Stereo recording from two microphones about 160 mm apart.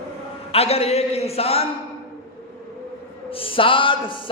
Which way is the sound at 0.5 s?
40° left (ahead or behind).